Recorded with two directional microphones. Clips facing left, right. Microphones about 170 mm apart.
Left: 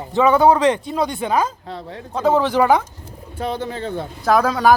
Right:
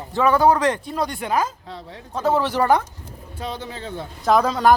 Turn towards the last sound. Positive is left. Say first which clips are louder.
# left 1 dB
turn(degrees=0)  # may be behind; listen again after turning